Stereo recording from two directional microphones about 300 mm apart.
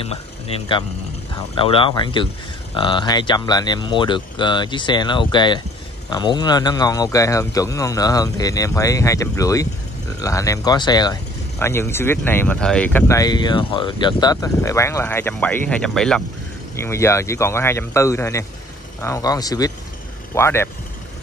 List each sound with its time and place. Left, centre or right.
0.0 s speech: centre